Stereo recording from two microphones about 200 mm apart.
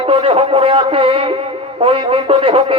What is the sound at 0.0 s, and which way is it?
A man's voice, 30° right (ahead or behind).